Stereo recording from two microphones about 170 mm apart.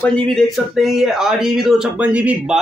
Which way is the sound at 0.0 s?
5° left (ahead or behind).